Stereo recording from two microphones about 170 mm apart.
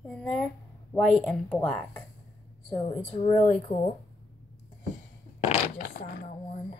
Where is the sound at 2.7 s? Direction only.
35° left (ahead or behind).